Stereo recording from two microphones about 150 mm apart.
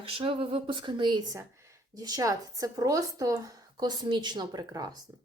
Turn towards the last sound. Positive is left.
turn(degrees=-25)  # may be behind; listen again after turning